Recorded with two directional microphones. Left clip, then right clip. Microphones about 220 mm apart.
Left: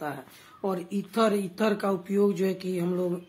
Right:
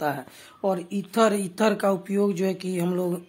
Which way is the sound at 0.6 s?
30° right (ahead or behind).